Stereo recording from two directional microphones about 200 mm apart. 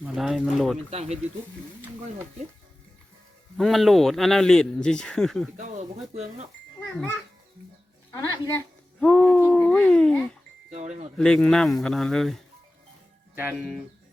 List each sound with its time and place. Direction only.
0.0 s speech: centre (ahead or behind)
0.9 s speech: 30° right (ahead or behind)
3.6 s speech: centre (ahead or behind)
5.5 s speech: 30° right (ahead or behind)
8.1 s a woman's voice: 15° left (ahead or behind)
9.0 s a sound: 5° left (ahead or behind)
10.8 s speech: 35° right (ahead or behind)
11.2 s speech: 5° left (ahead or behind)
13.3 s speech: 10° right (ahead or behind)